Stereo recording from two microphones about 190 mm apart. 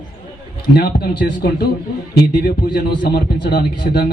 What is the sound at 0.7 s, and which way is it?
A man's voice, 55° left (ahead or behind).